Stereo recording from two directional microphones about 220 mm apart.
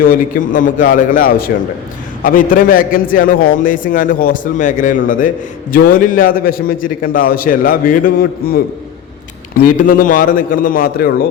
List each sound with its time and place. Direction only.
0.0 s a man's voice: 40° left (ahead or behind)
9.7 s a man's voice: 40° left (ahead or behind)